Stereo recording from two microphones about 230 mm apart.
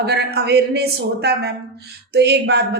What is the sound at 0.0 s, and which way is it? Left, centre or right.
A woman's voice, right.